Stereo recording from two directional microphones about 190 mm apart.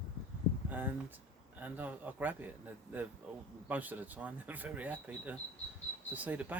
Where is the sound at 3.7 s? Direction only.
10° right (ahead or behind).